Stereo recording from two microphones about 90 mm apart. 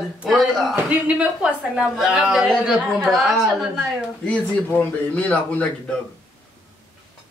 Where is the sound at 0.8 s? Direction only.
15° right (ahead or behind).